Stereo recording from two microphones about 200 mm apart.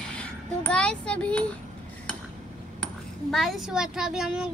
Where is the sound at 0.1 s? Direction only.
5° left (ahead or behind).